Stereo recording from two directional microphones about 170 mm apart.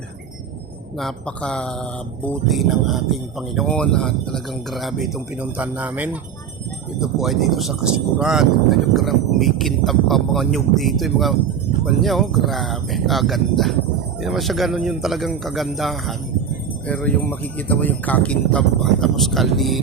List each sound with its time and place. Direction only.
0.9 s speech: 5° left (ahead or behind)